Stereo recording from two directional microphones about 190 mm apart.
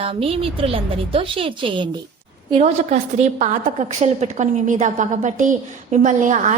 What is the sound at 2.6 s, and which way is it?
A woman's voice, 35° right (ahead or behind).